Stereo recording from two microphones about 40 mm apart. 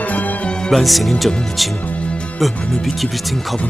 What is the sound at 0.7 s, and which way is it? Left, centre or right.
Speech, centre.